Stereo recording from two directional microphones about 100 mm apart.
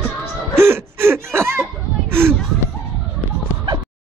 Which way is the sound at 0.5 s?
25° right (ahead or behind).